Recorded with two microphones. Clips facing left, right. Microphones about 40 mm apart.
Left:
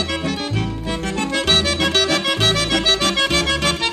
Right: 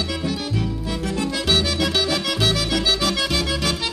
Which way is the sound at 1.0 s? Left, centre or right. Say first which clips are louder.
Left 3 dB; left.